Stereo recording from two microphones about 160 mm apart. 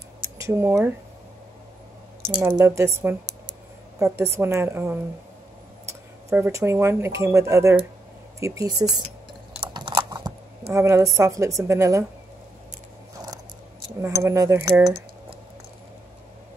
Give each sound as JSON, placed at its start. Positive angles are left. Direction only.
{"t": 0.4, "sound": "speech", "side_deg": -15}
{"t": 2.5, "sound": "speech", "side_deg": -20}
{"t": 6.3, "sound": "a woman's voice", "side_deg": -15}
{"t": 9.8, "sound": "chewing", "side_deg": -25}
{"t": 10.7, "sound": "a woman's voice", "side_deg": -15}
{"t": 14.0, "sound": "a woman's voice", "side_deg": -20}